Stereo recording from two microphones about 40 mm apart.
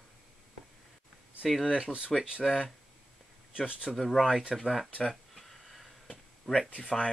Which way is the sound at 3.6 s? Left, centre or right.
Right.